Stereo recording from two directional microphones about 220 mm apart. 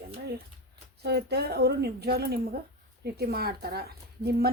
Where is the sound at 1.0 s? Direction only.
50° right (ahead or behind).